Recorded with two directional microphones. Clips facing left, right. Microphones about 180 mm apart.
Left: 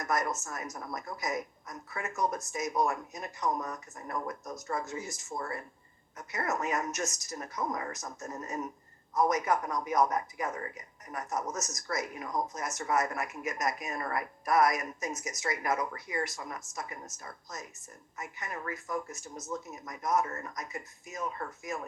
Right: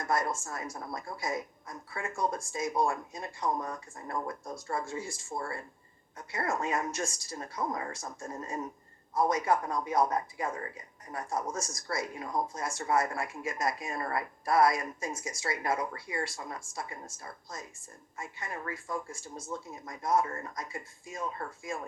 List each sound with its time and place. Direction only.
0.0 s speech: 30° right (ahead or behind)